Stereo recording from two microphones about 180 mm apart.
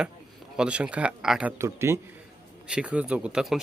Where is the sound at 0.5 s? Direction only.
5° right (ahead or behind).